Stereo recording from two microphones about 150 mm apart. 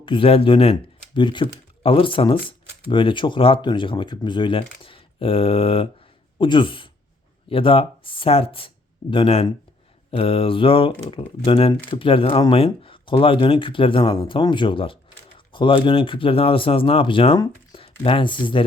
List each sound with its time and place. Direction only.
0.0 s speech: 35° left (ahead or behind)